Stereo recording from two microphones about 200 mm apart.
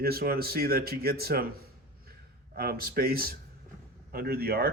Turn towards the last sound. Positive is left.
turn(degrees=-50)  # may be behind; listen again after turning